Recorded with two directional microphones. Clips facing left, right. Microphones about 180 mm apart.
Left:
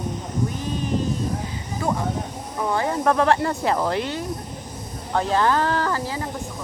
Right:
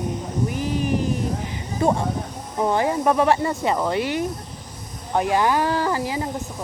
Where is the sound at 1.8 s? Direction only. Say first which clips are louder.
Right 4 dB; 25° right (ahead or behind); by 4.1 s centre (ahead or behind).